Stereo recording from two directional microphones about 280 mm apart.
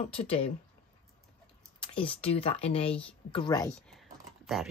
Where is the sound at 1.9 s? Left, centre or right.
Centre.